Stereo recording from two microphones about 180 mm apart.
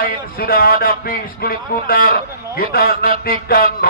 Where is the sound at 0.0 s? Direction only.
55° left (ahead or behind).